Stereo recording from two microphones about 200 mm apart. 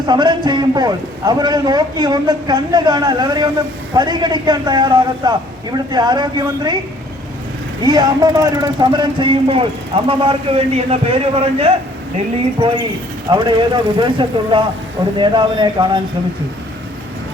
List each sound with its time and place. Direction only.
0.0 s speech: 20° right (ahead or behind)
7.8 s speech: 20° right (ahead or behind)